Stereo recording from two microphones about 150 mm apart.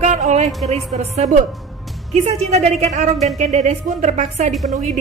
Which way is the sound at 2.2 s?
45° right (ahead or behind).